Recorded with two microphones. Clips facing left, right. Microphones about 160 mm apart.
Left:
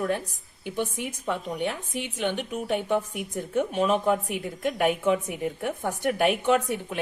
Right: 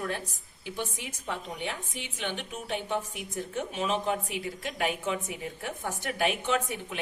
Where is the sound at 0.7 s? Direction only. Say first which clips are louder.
Left 7 dB; 50° left (ahead or behind).